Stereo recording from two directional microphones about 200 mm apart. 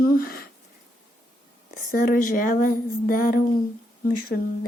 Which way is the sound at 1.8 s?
45° left (ahead or behind).